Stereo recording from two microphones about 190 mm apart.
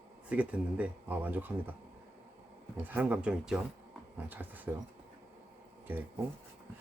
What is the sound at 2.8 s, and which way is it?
Speech, 10° right (ahead or behind).